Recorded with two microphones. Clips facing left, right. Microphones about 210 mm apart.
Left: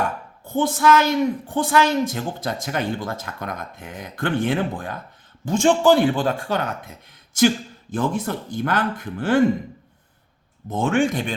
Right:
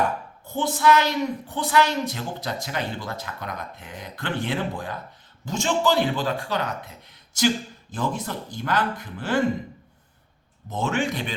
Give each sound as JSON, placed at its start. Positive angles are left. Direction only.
{"t": 0.4, "sound": "a woman's voice", "side_deg": 50}
{"t": 10.7, "sound": "a woman's voice", "side_deg": 50}